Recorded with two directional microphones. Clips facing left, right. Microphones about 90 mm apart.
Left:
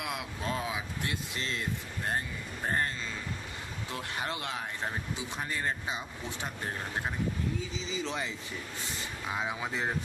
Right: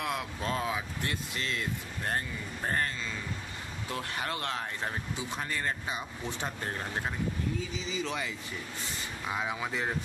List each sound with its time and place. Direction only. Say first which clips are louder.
0.0 s speech: right 2 dB; 10° left (ahead or behind)
3.9 s speech: right 1 dB; 15° left (ahead or behind)
7.7 s speech: right 1 dB; 30° left (ahead or behind)
9.3 s speech: right 1 dB; 15° left (ahead or behind)